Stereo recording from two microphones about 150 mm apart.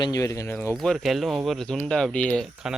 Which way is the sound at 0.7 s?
Centre (ahead or behind).